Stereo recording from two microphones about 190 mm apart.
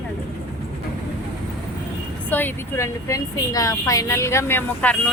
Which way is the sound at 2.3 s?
10° left (ahead or behind).